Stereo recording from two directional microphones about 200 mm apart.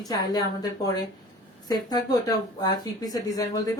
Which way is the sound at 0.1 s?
20° left (ahead or behind).